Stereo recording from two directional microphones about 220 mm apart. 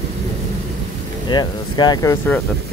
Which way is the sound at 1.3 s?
20° left (ahead or behind).